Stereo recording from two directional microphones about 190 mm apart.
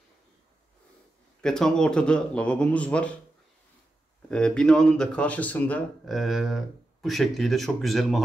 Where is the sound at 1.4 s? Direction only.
5° left (ahead or behind).